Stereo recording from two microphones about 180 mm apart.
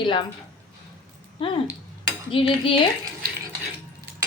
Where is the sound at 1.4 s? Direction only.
30° left (ahead or behind).